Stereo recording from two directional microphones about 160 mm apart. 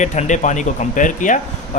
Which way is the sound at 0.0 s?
50° left (ahead or behind).